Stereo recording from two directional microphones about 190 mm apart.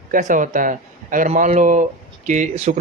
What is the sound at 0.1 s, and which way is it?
Speech, 45° right (ahead or behind).